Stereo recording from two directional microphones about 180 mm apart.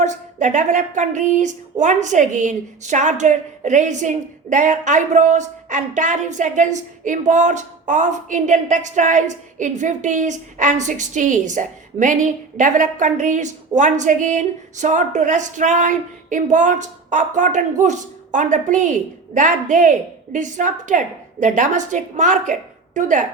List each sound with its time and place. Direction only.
0.0 s a woman's voice: 45° right (ahead or behind)